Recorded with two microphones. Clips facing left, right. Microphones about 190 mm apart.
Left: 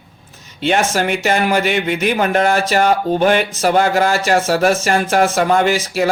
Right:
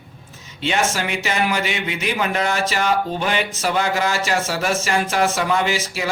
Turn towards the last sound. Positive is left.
turn(degrees=50)  # may be behind; listen again after turning